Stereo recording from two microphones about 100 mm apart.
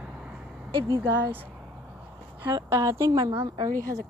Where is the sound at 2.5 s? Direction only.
30° right (ahead or behind).